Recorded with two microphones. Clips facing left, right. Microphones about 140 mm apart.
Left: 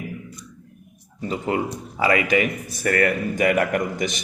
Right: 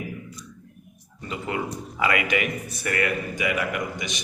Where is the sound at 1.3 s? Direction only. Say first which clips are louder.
Left 5 dB; 35° left (ahead or behind).